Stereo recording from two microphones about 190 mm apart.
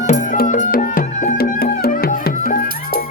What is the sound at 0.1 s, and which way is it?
Music, 40° left (ahead or behind).